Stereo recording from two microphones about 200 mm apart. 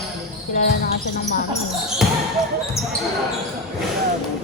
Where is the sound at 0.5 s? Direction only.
40° left (ahead or behind).